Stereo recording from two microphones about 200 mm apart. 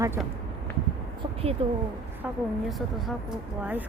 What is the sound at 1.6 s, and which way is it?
Speech, 30° right (ahead or behind).